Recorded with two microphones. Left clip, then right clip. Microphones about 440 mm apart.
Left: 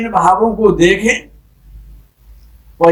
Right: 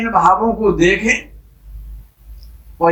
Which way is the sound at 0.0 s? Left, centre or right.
Centre.